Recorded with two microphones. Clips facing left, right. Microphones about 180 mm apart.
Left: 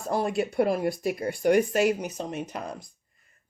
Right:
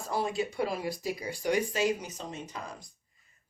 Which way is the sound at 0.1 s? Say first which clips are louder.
Left 5 dB; 55° left (ahead or behind).